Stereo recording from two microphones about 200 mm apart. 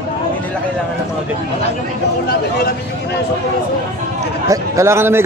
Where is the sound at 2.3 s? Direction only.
55° left (ahead or behind).